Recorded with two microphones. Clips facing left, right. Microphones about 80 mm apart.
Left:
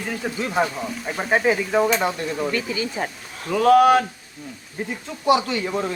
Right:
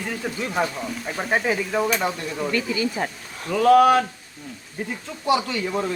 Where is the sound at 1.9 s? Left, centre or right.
Centre.